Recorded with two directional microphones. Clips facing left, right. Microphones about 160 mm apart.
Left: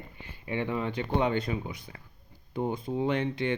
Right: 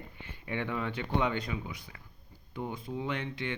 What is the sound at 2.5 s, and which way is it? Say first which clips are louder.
Speech: left 6 dB; 35° left (ahead or behind).